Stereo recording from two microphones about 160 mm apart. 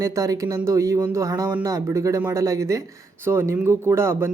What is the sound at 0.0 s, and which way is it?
Speech, 20° right (ahead or behind).